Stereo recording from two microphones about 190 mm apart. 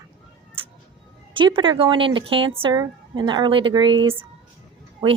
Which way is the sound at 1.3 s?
25° right (ahead or behind).